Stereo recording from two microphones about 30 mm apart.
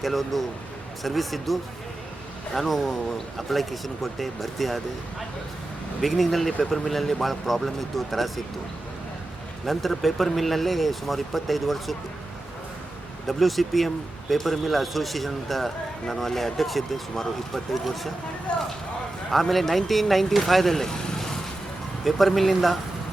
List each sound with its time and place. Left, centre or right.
0.0 s speech: centre
6.0 s speech: centre
9.6 s speech: centre
13.2 s speech: centre
18.5 s speech: left
19.3 s speech: centre
20.8 s speech: left
22.0 s speech: centre